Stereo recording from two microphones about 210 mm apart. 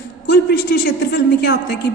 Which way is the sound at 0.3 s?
50° left (ahead or behind).